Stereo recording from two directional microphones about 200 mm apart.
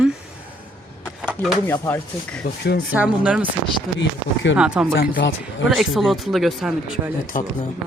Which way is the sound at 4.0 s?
65° left (ahead or behind).